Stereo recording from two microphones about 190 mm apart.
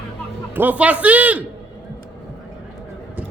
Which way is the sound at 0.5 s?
10° right (ahead or behind).